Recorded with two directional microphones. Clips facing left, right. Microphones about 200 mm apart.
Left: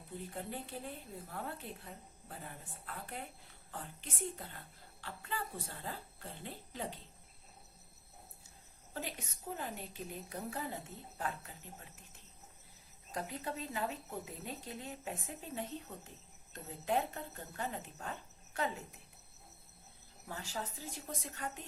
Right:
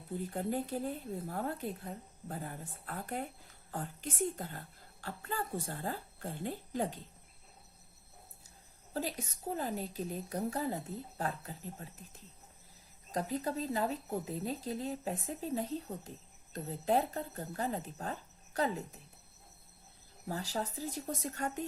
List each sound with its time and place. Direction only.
0.3 s a woman's voice: 40° right (ahead or behind)
8.4 s speech: 40° right (ahead or behind)
13.1 s speech: 40° right (ahead or behind)
20.2 s speech: 35° right (ahead or behind)